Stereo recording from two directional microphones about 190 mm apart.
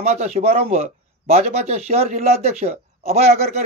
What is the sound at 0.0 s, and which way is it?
A man's voice, 35° right (ahead or behind).